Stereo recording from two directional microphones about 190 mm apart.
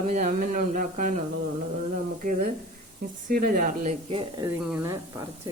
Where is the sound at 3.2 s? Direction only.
45° right (ahead or behind).